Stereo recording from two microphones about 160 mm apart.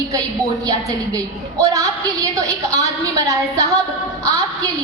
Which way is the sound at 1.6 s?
20° right (ahead or behind).